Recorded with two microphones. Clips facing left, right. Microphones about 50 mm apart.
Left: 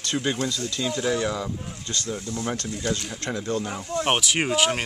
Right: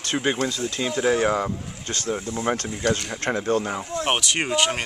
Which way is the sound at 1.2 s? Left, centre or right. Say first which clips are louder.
Right 5 dB; right.